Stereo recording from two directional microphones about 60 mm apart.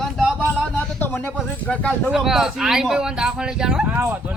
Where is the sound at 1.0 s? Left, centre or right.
Left.